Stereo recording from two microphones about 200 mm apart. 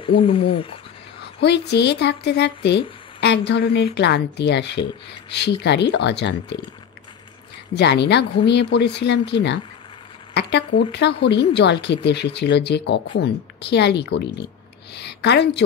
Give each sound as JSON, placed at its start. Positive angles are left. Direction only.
{"t": 0.0, "sound": "speech", "side_deg": 25}
{"t": 1.2, "sound": "speech", "side_deg": 55}
{"t": 7.7, "sound": "speech", "side_deg": 60}
{"t": 10.3, "sound": "speech", "side_deg": 60}